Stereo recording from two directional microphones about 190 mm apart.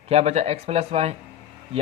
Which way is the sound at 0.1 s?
35° right (ahead or behind).